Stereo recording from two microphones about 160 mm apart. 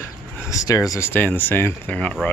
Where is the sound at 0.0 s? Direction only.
20° left (ahead or behind).